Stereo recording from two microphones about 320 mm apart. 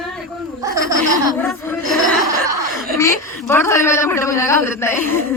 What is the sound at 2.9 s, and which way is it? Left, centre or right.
A woman's voice, centre.